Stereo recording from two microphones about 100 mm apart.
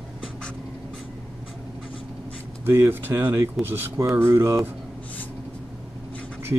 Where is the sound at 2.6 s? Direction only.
25° right (ahead or behind).